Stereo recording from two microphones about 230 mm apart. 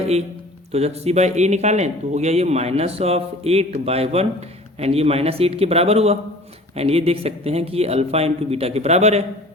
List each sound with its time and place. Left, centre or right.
0.7 s speech: right